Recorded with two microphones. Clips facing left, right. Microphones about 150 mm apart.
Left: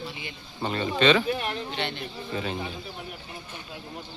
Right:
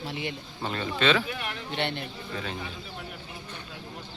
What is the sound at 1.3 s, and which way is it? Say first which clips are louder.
Speech: left 6 dB; 30° left (ahead or behind).